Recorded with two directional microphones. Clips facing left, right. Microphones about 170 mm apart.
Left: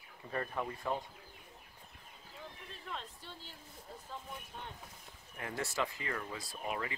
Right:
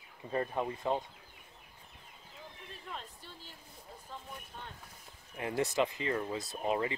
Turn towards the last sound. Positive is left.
turn(degrees=-25)  # may be behind; listen again after turning